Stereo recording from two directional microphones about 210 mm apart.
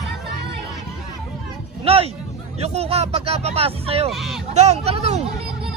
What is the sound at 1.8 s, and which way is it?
Music, 30° right (ahead or behind).